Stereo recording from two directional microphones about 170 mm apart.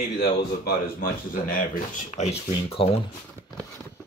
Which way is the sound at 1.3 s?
50° left (ahead or behind).